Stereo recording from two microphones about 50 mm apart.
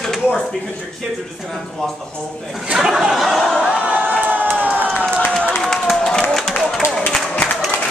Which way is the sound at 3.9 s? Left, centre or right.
Right.